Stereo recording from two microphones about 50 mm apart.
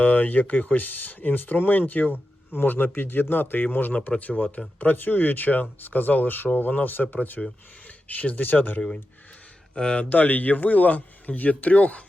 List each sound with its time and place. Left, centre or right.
0.0 s speech: left
3.9 s speech: left
9.7 s speech: centre
10.2 s speech: left